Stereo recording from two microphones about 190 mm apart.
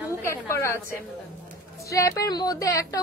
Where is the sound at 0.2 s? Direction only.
15° left (ahead or behind).